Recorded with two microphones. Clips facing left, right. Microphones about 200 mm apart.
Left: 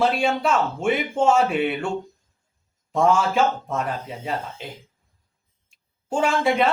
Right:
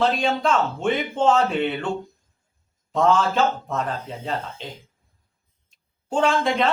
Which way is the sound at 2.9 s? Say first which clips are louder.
Even; 10° left (ahead or behind).